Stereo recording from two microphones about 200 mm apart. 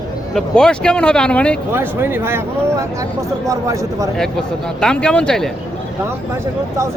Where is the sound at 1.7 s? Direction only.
10° right (ahead or behind).